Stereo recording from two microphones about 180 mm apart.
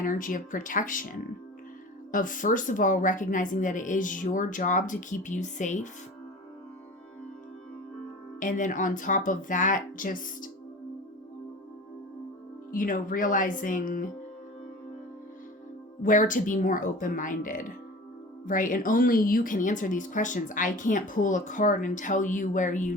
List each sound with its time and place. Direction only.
0.0 s a woman's voice: 50° left (ahead or behind)
2.1 s a woman's voice: 45° left (ahead or behind)
8.4 s a woman's voice: 45° left (ahead or behind)
12.7 s a woman's voice: 50° left (ahead or behind)
16.0 s a woman's voice: 45° left (ahead or behind)